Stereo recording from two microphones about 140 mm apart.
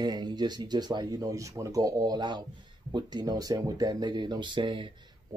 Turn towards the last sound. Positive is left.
turn(degrees=-35)  # may be behind; listen again after turning